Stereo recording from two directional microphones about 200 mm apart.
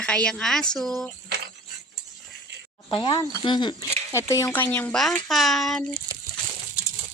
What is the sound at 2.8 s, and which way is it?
Speech, 25° left (ahead or behind).